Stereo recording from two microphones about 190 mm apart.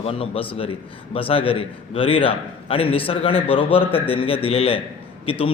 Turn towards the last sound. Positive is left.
turn(degrees=30)  # may be behind; listen again after turning